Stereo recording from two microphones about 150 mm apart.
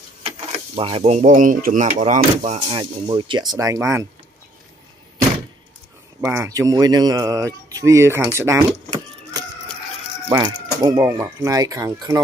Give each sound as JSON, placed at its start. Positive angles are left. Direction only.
{"t": 0.7, "sound": "speech", "side_deg": -35}
{"t": 2.7, "sound": "speech", "side_deg": -30}
{"t": 3.5, "sound": "speech", "side_deg": -20}
{"t": 6.2, "sound": "speech", "side_deg": -15}
{"t": 10.2, "sound": "speech", "side_deg": -25}